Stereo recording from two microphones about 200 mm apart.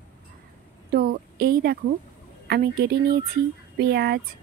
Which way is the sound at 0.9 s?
50° right (ahead or behind).